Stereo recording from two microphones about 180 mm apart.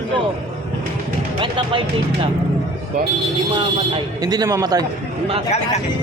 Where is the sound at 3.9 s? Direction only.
20° right (ahead or behind).